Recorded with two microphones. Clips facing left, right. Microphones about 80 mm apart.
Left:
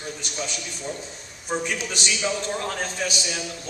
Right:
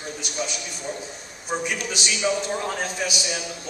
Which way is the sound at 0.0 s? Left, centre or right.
Centre.